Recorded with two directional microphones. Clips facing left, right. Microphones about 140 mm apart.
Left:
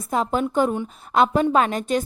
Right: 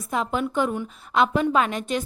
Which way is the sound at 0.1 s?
40° left (ahead or behind).